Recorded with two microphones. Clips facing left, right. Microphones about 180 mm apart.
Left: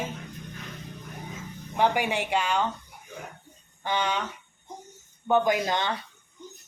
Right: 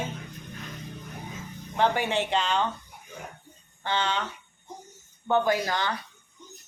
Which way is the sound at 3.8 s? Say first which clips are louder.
Left 1 dB; 15° left (ahead or behind).